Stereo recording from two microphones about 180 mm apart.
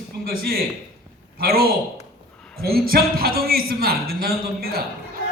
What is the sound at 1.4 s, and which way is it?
Speech, 60° right (ahead or behind).